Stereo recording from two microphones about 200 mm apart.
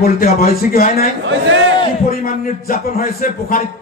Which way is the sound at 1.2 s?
70° right (ahead or behind).